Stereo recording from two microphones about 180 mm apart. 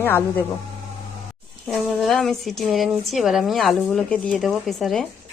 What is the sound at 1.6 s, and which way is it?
Speech, centre (ahead or behind).